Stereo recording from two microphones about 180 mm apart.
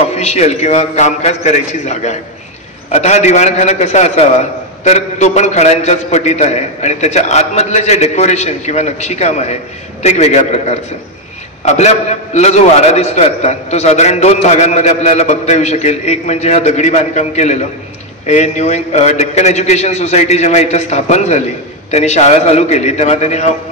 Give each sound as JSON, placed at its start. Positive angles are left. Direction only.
{"t": 0.1, "sound": "a man's voice", "side_deg": 35}